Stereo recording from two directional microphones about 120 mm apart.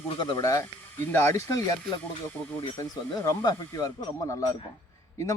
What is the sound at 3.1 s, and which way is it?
Speech, 35° left (ahead or behind).